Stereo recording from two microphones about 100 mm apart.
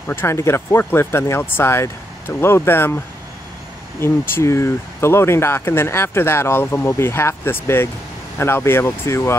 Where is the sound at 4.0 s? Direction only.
25° left (ahead or behind).